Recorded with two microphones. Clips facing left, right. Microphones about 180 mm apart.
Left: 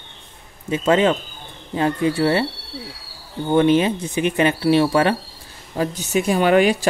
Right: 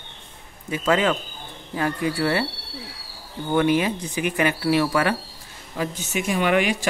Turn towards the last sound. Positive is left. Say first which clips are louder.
# left 5 dB
turn(degrees=35)  # may be behind; listen again after turning